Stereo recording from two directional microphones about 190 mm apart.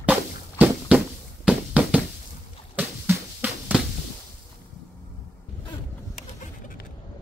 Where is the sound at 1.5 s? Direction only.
5° right (ahead or behind).